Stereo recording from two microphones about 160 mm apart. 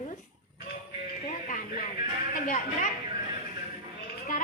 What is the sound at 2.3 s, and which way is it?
Speech, 55° left (ahead or behind).